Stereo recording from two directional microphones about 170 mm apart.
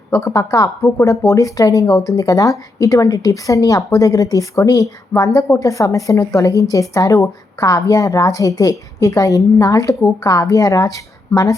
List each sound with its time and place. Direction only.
0.1 s speech: 20° left (ahead or behind)